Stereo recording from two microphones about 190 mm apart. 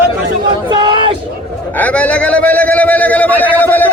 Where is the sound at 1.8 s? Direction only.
5° left (ahead or behind).